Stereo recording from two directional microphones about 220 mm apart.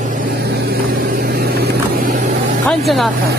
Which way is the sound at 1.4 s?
40° right (ahead or behind).